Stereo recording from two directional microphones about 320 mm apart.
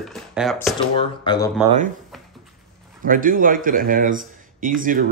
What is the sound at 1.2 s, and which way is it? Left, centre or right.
Speech, centre.